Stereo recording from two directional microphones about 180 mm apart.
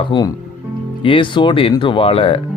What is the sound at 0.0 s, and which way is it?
Speech, 25° left (ahead or behind).